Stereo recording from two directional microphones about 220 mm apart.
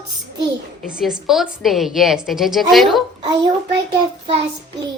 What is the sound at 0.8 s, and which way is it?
A woman's voice, centre (ahead or behind).